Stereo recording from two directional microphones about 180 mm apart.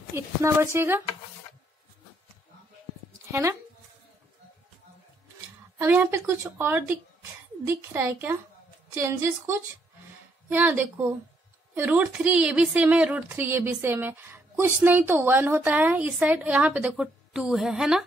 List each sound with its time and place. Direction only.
0.1 s a woman's voice: 15° right (ahead or behind)
3.3 s speech: 15° right (ahead or behind)
5.8 s a woman's voice: 10° right (ahead or behind)